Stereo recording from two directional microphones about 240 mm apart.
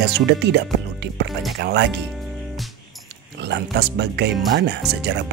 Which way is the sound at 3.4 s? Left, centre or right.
Right.